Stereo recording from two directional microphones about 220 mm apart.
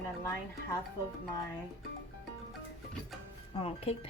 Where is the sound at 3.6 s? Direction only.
25° left (ahead or behind).